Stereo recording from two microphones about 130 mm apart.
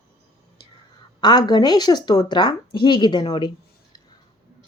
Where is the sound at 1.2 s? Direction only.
30° left (ahead or behind).